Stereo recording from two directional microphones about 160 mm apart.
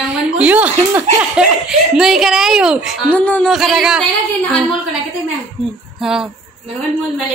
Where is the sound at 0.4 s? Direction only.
10° right (ahead or behind).